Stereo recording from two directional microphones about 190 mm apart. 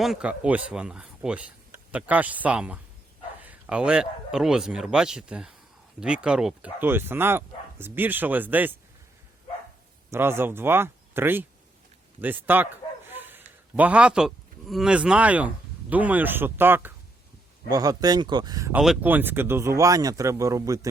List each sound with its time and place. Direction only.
0.0 s a man's voice: 5° right (ahead or behind)
10.1 s a man's voice: 10° right (ahead or behind)
18.7 s a man's voice: 5° right (ahead or behind)